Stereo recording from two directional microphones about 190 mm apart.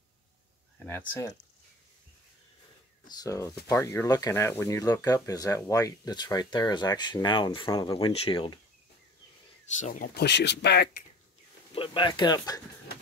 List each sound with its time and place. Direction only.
0.8 s speech: 10° left (ahead or behind)
3.1 s speech: 20° left (ahead or behind)
9.8 s speech: 40° left (ahead or behind)
10.2 s speech: 65° left (ahead or behind)
11.7 s speech: 25° left (ahead or behind)